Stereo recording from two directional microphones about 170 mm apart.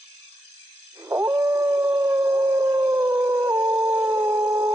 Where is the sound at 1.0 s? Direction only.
15° right (ahead or behind).